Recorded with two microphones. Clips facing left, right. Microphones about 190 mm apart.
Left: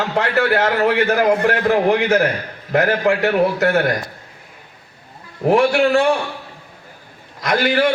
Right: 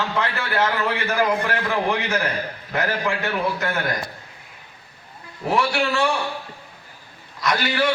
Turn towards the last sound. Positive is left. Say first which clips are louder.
# left 5 dB
turn(degrees=50)  # may be behind; listen again after turning